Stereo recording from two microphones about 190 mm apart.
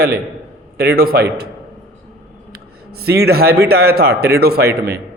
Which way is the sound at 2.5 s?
55° right (ahead or behind).